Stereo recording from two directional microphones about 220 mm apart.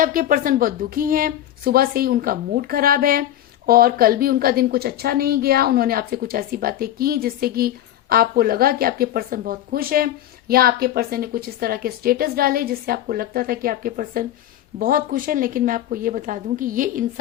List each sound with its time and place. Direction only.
0.0 s a woman's voice: 40° right (ahead or behind)